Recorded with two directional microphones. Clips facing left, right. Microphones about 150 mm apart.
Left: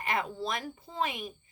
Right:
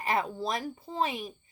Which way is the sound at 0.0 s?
35° right (ahead or behind).